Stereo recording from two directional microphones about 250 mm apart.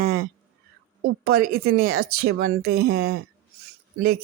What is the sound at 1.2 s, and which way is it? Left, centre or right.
Speech, right.